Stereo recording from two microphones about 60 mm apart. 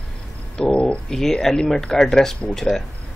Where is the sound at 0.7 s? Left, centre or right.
Left.